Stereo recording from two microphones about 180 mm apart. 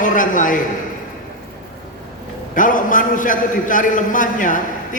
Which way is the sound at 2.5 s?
45° left (ahead or behind).